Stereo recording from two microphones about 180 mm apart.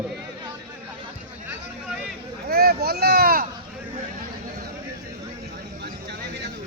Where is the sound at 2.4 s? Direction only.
60° right (ahead or behind).